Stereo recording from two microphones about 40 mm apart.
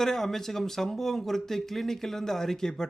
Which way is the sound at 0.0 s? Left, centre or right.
Centre.